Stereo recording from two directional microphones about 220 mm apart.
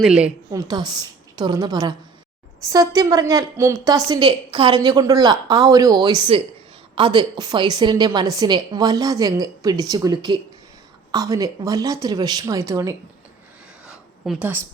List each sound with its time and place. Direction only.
0.0 s a woman's voice: 5° right (ahead or behind)
0.7 s a woman's voice: 20° right (ahead or behind)
13.8 s a sound: 5° right (ahead or behind)